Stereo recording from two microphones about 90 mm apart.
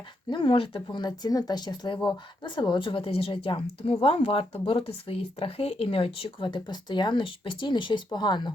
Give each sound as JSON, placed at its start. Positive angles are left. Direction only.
{"t": 0.3, "sound": "speech", "side_deg": 75}